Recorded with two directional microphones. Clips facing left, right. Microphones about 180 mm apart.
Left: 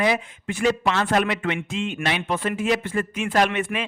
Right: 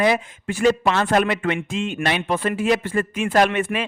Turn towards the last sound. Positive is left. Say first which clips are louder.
# right 3 dB
turn(degrees=-50)  # may be behind; listen again after turning